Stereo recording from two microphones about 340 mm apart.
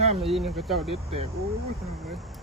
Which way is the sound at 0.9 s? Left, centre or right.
Centre.